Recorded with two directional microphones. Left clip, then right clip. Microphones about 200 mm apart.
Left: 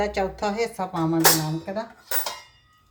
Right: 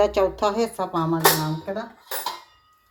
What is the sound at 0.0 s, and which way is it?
Speech, 30° right (ahead or behind).